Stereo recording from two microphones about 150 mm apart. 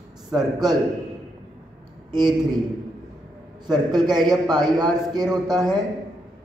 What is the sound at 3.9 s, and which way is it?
A man's voice, 25° right (ahead or behind).